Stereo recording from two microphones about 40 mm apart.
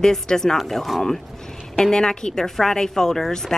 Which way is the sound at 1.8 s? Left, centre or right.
Centre.